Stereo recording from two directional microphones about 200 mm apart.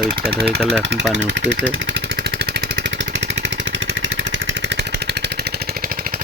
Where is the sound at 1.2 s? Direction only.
65° right (ahead or behind).